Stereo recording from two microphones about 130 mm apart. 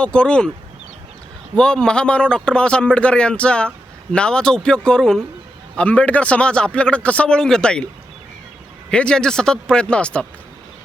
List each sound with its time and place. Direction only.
0.0 s speech: 10° left (ahead or behind)
1.5 s speech: 5° left (ahead or behind)
8.9 s speech: 5° left (ahead or behind)